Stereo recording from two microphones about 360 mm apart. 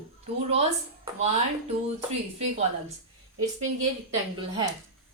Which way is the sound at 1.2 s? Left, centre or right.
Centre.